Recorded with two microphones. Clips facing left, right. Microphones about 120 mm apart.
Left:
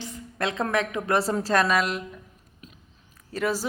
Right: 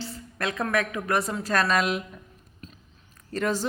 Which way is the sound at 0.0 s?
20° left (ahead or behind).